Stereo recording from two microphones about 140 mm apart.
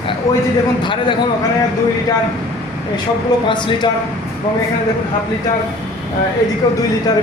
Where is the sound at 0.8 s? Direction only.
35° left (ahead or behind).